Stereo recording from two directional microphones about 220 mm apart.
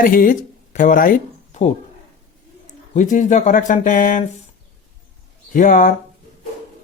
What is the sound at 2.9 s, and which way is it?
Speech, 35° left (ahead or behind).